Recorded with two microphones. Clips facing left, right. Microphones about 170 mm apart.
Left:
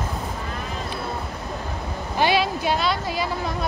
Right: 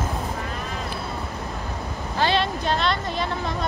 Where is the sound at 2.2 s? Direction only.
10° left (ahead or behind).